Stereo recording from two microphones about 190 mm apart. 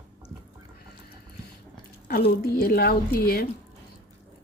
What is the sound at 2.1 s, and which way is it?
Speech, 55° left (ahead or behind).